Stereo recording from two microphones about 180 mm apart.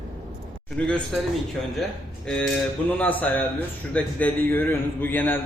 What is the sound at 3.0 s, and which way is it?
A man's voice, 10° left (ahead or behind).